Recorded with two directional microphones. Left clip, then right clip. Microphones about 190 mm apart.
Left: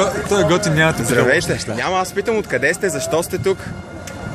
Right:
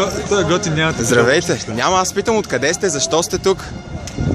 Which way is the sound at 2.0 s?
35° right (ahead or behind).